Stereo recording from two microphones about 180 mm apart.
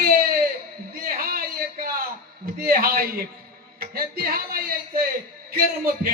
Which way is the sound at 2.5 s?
55° right (ahead or behind).